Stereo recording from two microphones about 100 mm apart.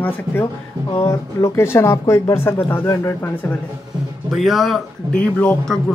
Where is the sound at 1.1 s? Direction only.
30° left (ahead or behind).